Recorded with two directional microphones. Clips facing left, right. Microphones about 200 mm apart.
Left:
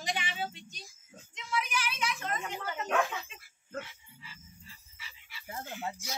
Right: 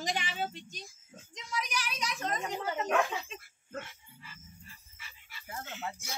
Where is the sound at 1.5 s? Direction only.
35° right (ahead or behind).